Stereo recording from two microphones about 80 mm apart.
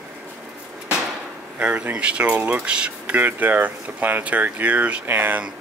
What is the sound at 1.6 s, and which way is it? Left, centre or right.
Speech, centre.